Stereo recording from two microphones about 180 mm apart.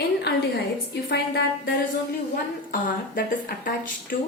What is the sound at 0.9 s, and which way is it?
Speech, 70° left (ahead or behind).